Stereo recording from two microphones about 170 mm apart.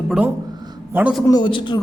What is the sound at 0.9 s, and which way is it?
Speech, 10° right (ahead or behind).